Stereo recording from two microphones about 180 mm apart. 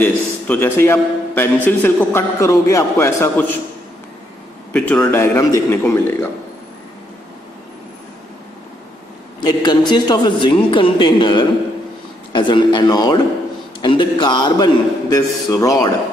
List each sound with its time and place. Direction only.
0.0 s a man's voice: 10° left (ahead or behind)
4.7 s a man's voice: 5° left (ahead or behind)
9.4 s a man's voice: 25° left (ahead or behind)